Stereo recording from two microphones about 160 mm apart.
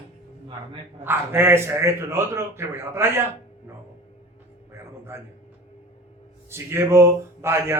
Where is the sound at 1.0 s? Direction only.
15° right (ahead or behind).